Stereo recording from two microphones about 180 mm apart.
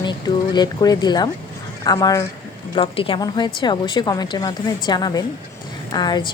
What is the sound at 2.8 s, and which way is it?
A woman's voice, 30° left (ahead or behind).